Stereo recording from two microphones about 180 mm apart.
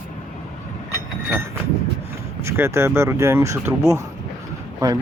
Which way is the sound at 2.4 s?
15° right (ahead or behind).